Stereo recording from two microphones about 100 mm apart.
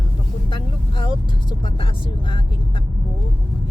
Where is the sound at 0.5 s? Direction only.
50° left (ahead or behind).